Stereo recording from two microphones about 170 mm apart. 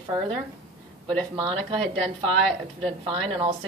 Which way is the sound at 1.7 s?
35° right (ahead or behind).